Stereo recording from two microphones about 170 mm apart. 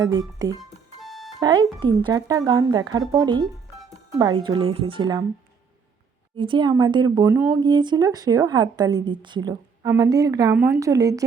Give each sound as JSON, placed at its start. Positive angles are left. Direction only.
{"t": 0.0, "sound": "speech", "side_deg": -20}
{"t": 0.6, "sound": "music", "side_deg": 0}
{"t": 1.4, "sound": "speech", "side_deg": -25}
{"t": 6.3, "sound": "speech", "side_deg": -30}
{"t": 7.6, "sound": "speech", "side_deg": -25}